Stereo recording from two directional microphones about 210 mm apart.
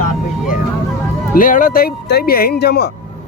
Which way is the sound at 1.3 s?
40° left (ahead or behind).